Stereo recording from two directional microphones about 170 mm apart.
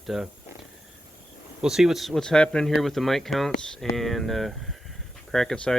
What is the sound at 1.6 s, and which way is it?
Speech, centre (ahead or behind).